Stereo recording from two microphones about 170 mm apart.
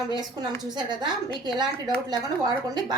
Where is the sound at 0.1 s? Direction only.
25° right (ahead or behind).